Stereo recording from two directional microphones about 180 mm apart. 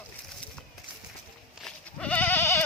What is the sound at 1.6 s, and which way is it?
Goat, 5° left (ahead or behind).